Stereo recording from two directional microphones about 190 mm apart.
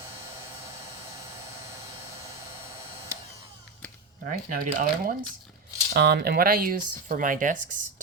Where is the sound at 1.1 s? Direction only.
15° right (ahead or behind).